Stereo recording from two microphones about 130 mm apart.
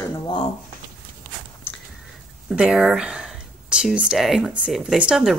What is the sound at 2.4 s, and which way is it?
Speech, 5° right (ahead or behind).